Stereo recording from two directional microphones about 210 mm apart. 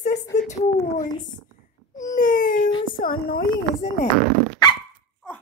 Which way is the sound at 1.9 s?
40° left (ahead or behind).